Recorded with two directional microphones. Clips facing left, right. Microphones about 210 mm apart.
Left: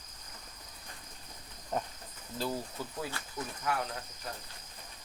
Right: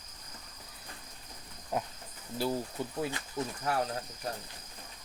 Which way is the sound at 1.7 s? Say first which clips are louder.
Right 1 dB; 5° right (ahead or behind).